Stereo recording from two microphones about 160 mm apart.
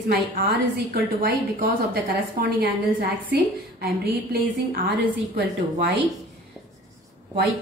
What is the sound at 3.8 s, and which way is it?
A woman's voice, 80° right.